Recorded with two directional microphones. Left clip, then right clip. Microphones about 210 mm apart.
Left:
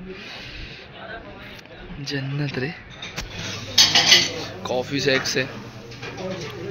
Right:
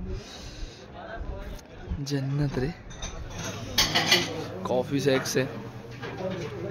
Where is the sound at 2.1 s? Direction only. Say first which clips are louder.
Left 3 dB; 15° right (ahead or behind).